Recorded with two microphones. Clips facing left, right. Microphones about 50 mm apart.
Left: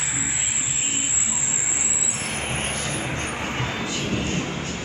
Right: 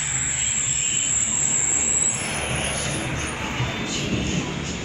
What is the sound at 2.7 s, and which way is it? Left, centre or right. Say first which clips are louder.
Vehicle: even; left.